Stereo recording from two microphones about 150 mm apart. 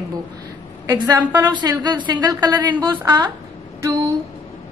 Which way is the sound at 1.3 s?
25° right (ahead or behind).